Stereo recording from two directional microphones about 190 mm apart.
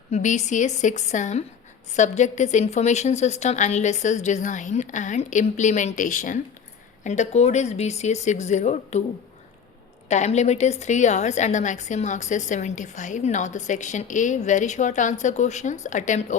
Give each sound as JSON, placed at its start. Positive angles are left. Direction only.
{"t": 0.1, "sound": "a woman's voice", "side_deg": 40}
{"t": 10.1, "sound": "a woman's voice", "side_deg": 35}